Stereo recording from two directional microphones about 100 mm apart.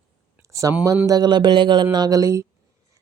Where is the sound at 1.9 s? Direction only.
40° right (ahead or behind).